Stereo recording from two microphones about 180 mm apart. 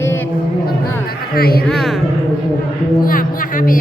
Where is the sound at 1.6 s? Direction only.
Centre (ahead or behind).